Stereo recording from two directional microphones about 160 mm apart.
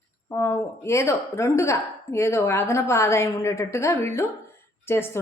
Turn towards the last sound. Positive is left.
turn(degrees=15)  # may be behind; listen again after turning